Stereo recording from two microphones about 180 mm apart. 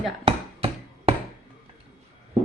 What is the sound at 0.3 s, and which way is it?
Hammer, 30° right (ahead or behind).